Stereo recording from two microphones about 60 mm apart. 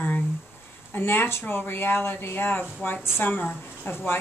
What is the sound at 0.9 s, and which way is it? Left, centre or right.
A woman's voice, left.